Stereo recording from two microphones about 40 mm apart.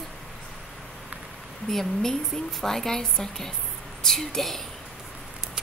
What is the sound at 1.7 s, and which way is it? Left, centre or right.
A woman's voice, centre.